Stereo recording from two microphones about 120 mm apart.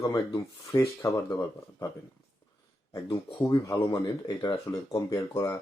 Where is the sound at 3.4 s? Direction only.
25° left (ahead or behind).